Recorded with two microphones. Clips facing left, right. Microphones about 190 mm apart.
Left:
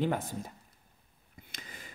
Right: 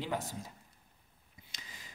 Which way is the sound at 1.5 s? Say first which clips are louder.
Left 5 dB; 55° left (ahead or behind).